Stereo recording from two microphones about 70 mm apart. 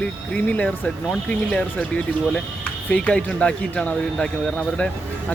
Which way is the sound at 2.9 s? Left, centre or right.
Centre.